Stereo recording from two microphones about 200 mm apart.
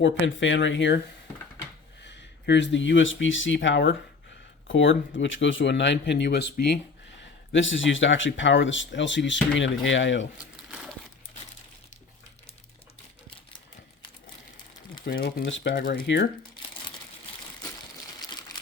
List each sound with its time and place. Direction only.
0.0 s speech: 65° left (ahead or behind)
2.0 s speech: 60° left (ahead or behind)
7.2 s speech: 65° left (ahead or behind)
10.3 s crumpling: 5° right (ahead or behind)
15.0 s speech: 50° left (ahead or behind)
15.4 s speech: 70° left (ahead or behind)
15.8 s speech: 55° left (ahead or behind)
18.2 s water: 20° left (ahead or behind)